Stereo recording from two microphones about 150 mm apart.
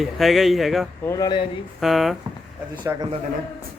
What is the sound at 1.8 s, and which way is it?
Speech, centre (ahead or behind).